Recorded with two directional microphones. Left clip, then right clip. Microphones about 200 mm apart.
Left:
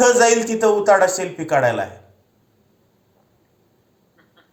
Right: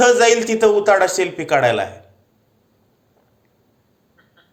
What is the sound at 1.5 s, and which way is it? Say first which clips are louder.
Speech: right 2 dB; 60° right (ahead or behind).